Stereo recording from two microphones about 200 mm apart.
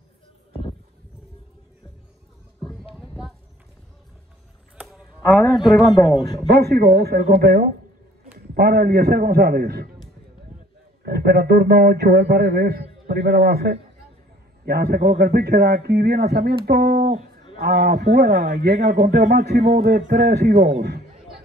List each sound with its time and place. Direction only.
4.7 s a sound: 5° right (ahead or behind)
5.4 s a man's voice: 20° left (ahead or behind)
6.5 s speech: 55° right (ahead or behind)
11.1 s speech: 50° right (ahead or behind)